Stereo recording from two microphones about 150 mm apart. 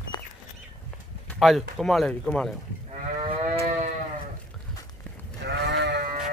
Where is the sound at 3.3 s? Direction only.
45° right (ahead or behind).